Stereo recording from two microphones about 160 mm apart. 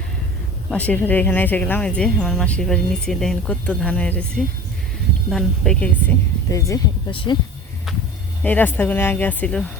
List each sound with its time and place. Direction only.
0.7 s speech: 10° left (ahead or behind)
5.3 s speech: 5° left (ahead or behind)
6.5 s speech: 20° left (ahead or behind)
7.1 s speech: 35° left (ahead or behind)
8.4 s speech: 10° left (ahead or behind)